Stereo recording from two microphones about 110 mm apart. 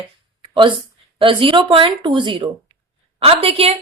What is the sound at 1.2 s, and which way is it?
Speech, 50° right (ahead or behind).